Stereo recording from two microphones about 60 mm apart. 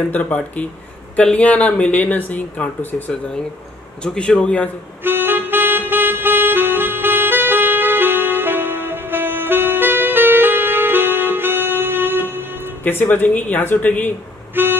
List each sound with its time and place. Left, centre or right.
0.1 s speech: left
4.0 s speech: centre
5.0 s music: right
12.8 s speech: left
14.5 s vehicle: right